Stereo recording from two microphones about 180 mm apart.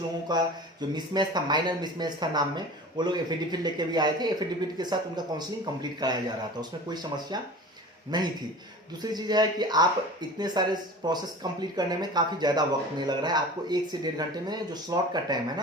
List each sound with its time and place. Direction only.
0.3 s speech: 25° right (ahead or behind)